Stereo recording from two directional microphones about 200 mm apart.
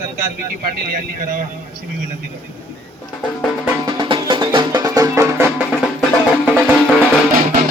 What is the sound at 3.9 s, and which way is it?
Music, 25° right (ahead or behind).